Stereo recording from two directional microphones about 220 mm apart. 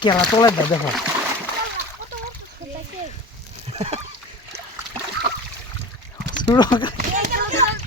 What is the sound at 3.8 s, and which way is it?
Speech, 30° right (ahead or behind).